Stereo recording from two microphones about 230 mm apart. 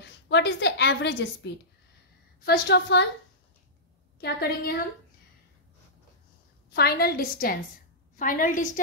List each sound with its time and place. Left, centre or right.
0.0 s a woman's voice: left
4.2 s a woman's voice: left
6.7 s a woman's voice: left